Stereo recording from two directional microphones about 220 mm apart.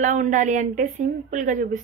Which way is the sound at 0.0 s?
35° right (ahead or behind).